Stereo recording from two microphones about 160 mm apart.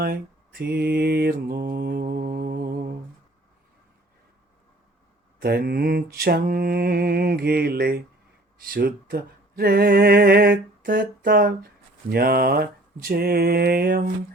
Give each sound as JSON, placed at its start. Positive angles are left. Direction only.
{"t": 0.6, "sound": "mantra", "side_deg": -80}
{"t": 5.4, "sound": "speech", "side_deg": -75}